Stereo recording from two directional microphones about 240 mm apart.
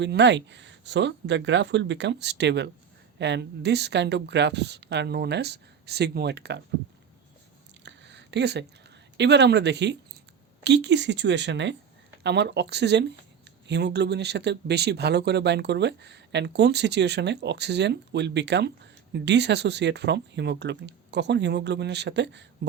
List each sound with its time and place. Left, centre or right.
0.0 s speech: right
7.9 s a sound: right
9.1 s speech: right